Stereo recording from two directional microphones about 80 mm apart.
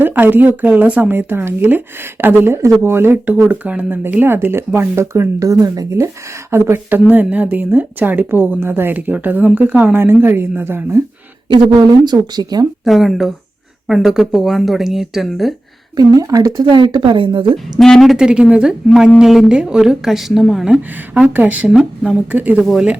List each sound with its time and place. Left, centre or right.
0.0 s speech: right
3.5 s speech: centre
5.4 s speech: right
12.0 s speech: right
12.8 s a woman's voice: centre
16.0 s speech: right
16.6 s speech: right
17.7 s a woman's voice: centre
18.3 s a woman's voice: centre
21.2 s speech: right
21.7 s a woman's voice: centre
22.3 s speech: centre
22.6 s a woman's voice: centre